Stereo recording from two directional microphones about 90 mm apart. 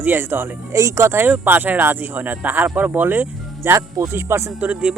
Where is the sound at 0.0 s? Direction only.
25° right (ahead or behind).